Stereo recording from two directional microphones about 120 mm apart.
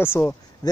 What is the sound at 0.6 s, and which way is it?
Speech, 30° left (ahead or behind).